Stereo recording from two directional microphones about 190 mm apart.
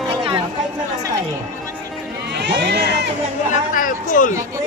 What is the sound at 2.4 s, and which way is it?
Crowd, 60° right (ahead or behind).